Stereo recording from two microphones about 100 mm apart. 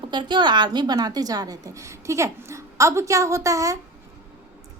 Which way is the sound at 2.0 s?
30° right (ahead or behind).